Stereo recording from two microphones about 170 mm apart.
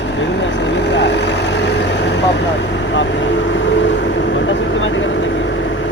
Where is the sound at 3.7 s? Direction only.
90° left.